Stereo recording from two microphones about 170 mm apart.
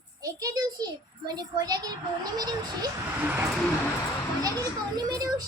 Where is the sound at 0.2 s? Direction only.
20° right (ahead or behind).